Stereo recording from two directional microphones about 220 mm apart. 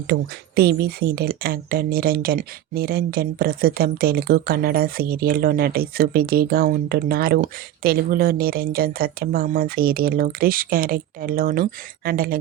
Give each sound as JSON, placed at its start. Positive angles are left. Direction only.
{"t": 0.1, "sound": "speech", "side_deg": -45}